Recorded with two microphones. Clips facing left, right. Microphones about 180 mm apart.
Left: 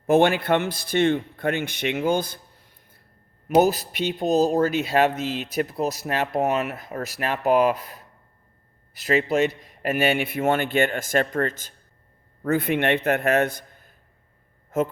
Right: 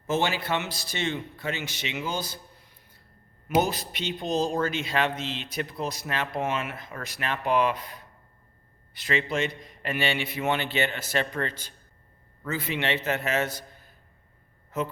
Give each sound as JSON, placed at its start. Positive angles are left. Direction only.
{"t": 0.1, "sound": "speech", "side_deg": 55}
{"t": 3.5, "sound": "a man's voice", "side_deg": 40}
{"t": 4.3, "sound": "speech", "side_deg": 5}
{"t": 4.9, "sound": "a man's voice", "side_deg": 40}
{"t": 5.1, "sound": "speech", "side_deg": 5}
{"t": 5.4, "sound": "a man's voice", "side_deg": 40}